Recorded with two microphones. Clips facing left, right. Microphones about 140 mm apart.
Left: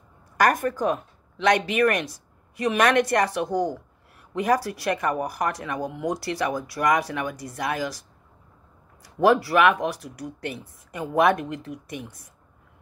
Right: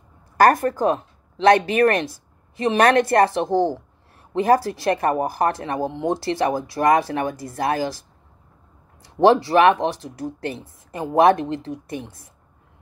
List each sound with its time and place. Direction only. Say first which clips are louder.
0.4 s speech: right 5 dB; 35° right (ahead or behind)
9.0 s speech: right 4 dB; 25° right (ahead or behind)